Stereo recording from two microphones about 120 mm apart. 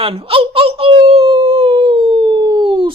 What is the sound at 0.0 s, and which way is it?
Wail, 55° right (ahead or behind).